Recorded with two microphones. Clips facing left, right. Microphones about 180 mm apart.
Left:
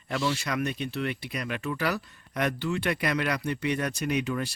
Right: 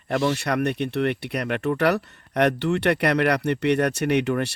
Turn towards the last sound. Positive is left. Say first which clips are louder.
# right 7 dB
turn(degrees=-70)  # may be behind; listen again after turning